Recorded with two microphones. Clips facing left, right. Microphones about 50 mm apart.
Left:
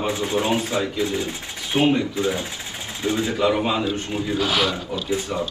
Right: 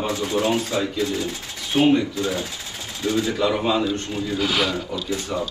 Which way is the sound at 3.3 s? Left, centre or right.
Centre.